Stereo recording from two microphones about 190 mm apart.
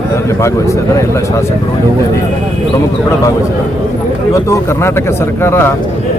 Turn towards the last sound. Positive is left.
turn(degrees=15)  # may be behind; listen again after turning